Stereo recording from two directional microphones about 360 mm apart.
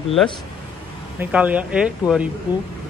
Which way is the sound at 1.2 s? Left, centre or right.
Centre.